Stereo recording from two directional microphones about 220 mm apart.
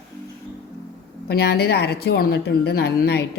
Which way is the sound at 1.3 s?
45° left (ahead or behind).